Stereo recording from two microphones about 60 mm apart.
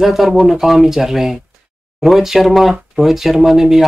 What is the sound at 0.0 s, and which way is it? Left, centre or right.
Speech, centre.